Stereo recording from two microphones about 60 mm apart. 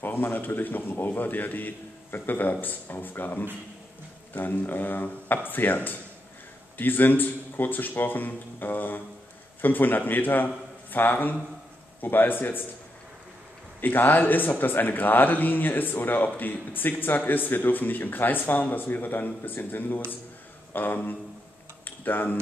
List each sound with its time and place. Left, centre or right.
0.0 s a man's voice: left
13.7 s speech: left